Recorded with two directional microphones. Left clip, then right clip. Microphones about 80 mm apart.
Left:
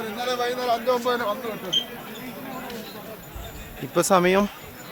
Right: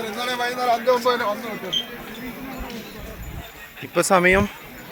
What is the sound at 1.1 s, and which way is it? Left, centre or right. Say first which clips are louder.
Speech: right 3 dB; right.